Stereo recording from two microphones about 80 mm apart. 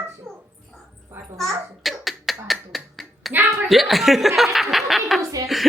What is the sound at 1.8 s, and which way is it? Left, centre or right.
Quack, centre.